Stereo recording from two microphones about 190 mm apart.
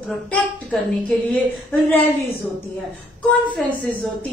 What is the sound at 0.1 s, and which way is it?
A woman's voice, 5° left (ahead or behind).